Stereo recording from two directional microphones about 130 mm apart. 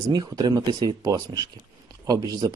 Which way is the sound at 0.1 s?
30° right (ahead or behind).